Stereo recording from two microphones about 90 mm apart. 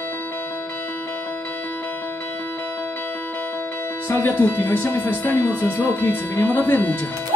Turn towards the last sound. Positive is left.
turn(degrees=20)  # may be behind; listen again after turning